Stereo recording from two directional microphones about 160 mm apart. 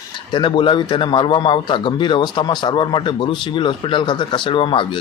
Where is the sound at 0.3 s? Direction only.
30° left (ahead or behind).